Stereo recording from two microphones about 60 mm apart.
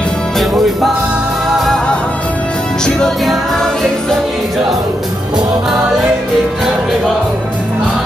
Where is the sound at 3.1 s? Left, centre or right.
Centre.